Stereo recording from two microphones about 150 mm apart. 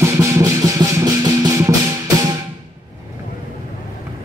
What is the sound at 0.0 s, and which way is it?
Music, 20° right (ahead or behind).